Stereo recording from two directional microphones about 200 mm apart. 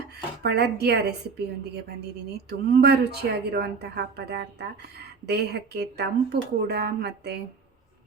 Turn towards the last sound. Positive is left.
turn(degrees=-55)  # may be behind; listen again after turning